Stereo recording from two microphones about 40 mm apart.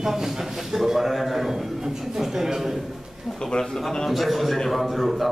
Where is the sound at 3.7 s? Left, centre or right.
Centre.